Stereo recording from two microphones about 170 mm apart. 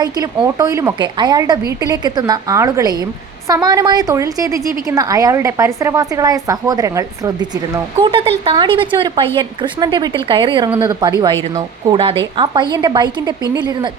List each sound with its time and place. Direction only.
0.4 s a woman's voice: 20° right (ahead or behind)
8.0 s a woman's voice: 35° right (ahead or behind)